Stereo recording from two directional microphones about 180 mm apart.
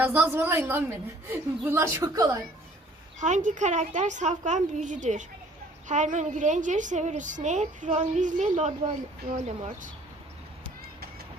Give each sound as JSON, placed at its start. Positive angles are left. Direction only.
{"t": 0.0, "sound": "speech", "side_deg": -10}
{"t": 3.2, "sound": "a woman's voice", "side_deg": -45}